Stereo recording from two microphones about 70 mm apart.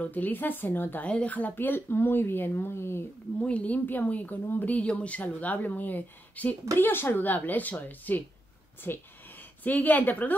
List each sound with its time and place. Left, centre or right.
0.0 s speech: left
3.3 s speech: centre